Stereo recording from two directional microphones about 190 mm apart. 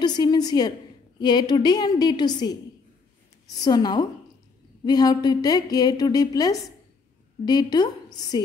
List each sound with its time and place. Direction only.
0.0 s a woman's voice: 20° left (ahead or behind)
3.6 s a woman's voice: 20° left (ahead or behind)